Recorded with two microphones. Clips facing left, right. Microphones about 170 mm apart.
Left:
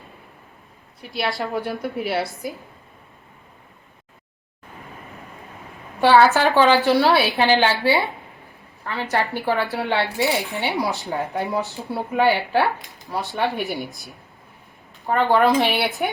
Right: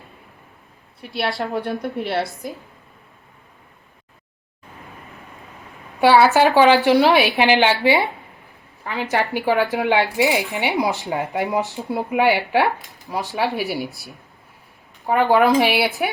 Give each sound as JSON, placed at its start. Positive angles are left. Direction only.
{"t": 1.0, "sound": "a woman's voice", "side_deg": 0}
{"t": 6.0, "sound": "a woman's voice", "side_deg": -10}
{"t": 13.3, "sound": "a woman's voice", "side_deg": 0}
{"t": 15.0, "sound": "speech", "side_deg": -15}
{"t": 15.4, "sound": "a woman's voice", "side_deg": -5}